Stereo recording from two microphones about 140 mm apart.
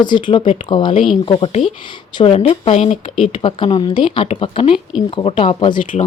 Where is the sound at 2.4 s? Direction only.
50° left (ahead or behind).